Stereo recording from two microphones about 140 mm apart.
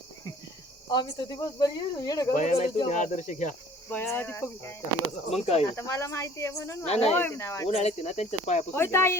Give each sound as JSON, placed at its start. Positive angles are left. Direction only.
{"t": 0.9, "sound": "speech", "side_deg": 30}
{"t": 2.3, "sound": "speech", "side_deg": 55}
{"t": 3.9, "sound": "speech", "side_deg": 15}
{"t": 5.3, "sound": "speech", "side_deg": 45}
{"t": 5.7, "sound": "speech", "side_deg": 25}
{"t": 6.8, "sound": "speech", "side_deg": 50}
{"t": 7.1, "sound": "speech", "side_deg": 15}
{"t": 7.7, "sound": "speech", "side_deg": 50}
{"t": 8.7, "sound": "speech", "side_deg": 15}